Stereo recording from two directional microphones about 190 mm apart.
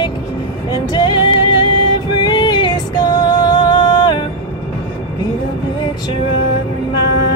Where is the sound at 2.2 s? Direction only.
25° left (ahead or behind).